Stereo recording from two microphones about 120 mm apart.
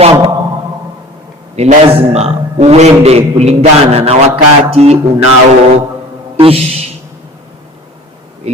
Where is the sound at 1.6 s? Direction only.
60° right (ahead or behind).